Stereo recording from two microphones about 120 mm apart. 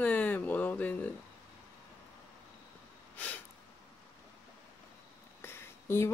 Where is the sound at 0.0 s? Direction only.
15° left (ahead or behind).